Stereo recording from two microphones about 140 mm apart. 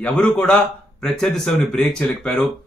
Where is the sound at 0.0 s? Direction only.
5° left (ahead or behind).